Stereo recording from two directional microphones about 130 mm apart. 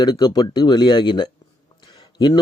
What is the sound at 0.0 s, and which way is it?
A man's voice, 30° left (ahead or behind).